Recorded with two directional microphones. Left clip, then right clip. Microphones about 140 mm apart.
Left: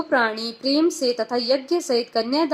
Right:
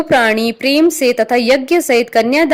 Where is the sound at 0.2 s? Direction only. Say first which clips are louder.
Right 10 dB; 50° right (ahead or behind).